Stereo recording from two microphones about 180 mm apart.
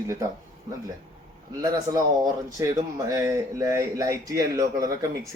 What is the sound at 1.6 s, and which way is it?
Speech, 20° right (ahead or behind).